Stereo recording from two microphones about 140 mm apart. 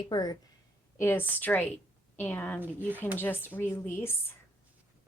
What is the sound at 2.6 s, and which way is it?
Speech, 15° right (ahead or behind).